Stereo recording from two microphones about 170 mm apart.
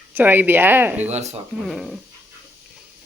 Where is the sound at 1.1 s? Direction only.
40° right (ahead or behind).